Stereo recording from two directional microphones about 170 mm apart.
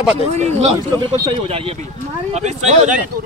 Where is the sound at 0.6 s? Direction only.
35° right (ahead or behind).